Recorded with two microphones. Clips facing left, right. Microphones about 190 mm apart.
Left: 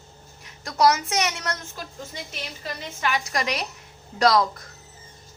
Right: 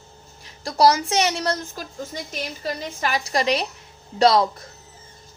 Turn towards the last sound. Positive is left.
turn(degrees=-30)  # may be behind; listen again after turning